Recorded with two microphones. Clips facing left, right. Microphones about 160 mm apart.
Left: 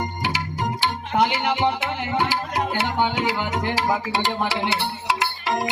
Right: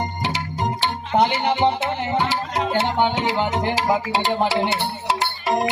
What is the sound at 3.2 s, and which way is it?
Speech, 25° right (ahead or behind).